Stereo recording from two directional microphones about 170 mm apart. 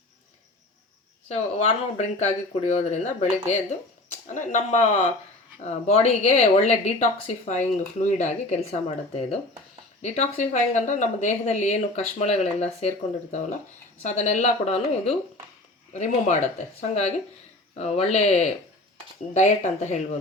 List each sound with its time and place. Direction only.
1.3 s speech: 40° left (ahead or behind)
14.0 s speech: 45° left (ahead or behind)
17.7 s speech: 40° left (ahead or behind)